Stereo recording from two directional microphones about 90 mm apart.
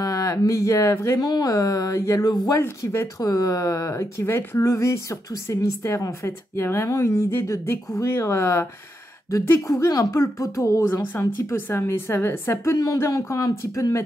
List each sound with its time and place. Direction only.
0.0 s speech: 40° left (ahead or behind)
1.2 s speech: 45° left (ahead or behind); by 4.6 s 25° left (ahead or behind)
4.6 s speech: 35° left (ahead or behind)
9.7 s speech: 40° left (ahead or behind)
12.7 s speech: 40° left (ahead or behind)